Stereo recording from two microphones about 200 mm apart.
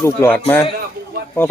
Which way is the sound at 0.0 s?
10° left (ahead or behind).